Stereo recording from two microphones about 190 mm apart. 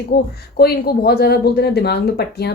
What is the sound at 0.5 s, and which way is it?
Speech, 55° left (ahead or behind).